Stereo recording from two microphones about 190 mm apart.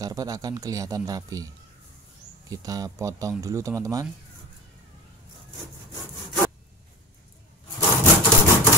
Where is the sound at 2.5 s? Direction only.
20° right (ahead or behind).